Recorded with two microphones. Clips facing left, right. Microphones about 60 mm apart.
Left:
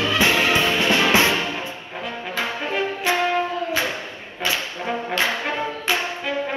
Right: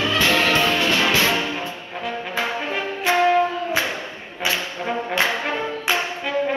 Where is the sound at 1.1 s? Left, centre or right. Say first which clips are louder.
Left 2 dB; centre.